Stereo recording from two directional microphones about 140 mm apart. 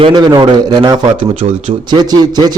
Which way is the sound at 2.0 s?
30° right (ahead or behind).